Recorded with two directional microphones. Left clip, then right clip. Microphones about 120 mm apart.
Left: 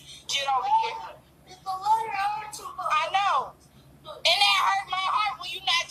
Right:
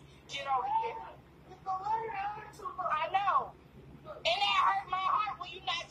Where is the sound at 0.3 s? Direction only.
30° left (ahead or behind).